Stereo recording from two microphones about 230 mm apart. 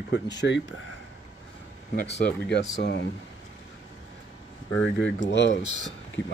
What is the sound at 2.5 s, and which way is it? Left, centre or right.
Speech, left.